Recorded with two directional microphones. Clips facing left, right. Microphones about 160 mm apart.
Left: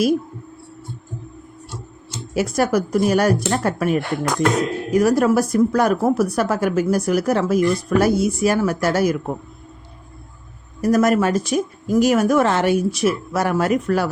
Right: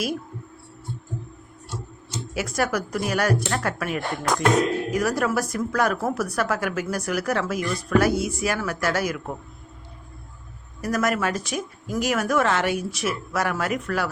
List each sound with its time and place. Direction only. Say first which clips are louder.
2.3 s speech: left 7 dB; 35° left (ahead or behind)
10.8 s speech: left 8 dB; 35° left (ahead or behind)